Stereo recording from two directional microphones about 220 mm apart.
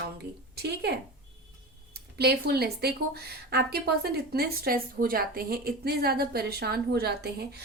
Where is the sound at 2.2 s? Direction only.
45° right (ahead or behind).